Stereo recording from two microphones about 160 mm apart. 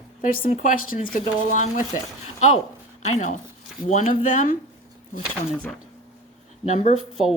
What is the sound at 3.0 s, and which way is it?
Speech, 50° left (ahead or behind).